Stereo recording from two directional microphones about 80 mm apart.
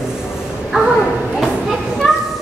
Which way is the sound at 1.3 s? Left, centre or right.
Centre.